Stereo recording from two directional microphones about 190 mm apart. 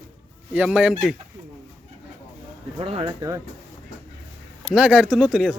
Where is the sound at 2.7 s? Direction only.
30° right (ahead or behind).